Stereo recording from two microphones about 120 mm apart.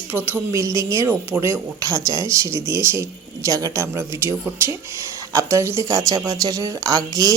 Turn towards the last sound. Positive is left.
turn(degrees=-30)  # may be behind; listen again after turning